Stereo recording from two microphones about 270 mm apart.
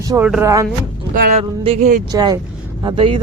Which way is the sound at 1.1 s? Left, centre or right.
Right.